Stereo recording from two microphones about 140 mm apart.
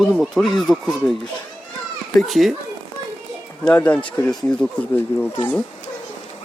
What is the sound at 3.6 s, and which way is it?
Speech, 10° left (ahead or behind).